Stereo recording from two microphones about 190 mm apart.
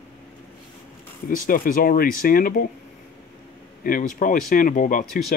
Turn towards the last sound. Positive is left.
turn(degrees=45)  # may be behind; listen again after turning